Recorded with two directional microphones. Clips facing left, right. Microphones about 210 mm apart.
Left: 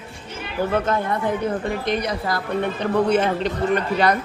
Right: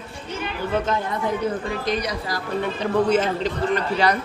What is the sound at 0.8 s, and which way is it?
Speech, 55° left (ahead or behind).